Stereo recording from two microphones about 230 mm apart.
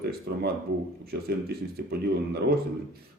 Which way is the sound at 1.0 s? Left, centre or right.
Right.